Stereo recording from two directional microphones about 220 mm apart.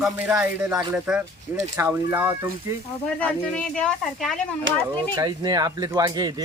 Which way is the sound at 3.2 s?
5° left (ahead or behind).